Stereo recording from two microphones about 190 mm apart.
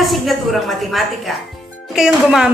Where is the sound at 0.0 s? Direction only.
Centre (ahead or behind).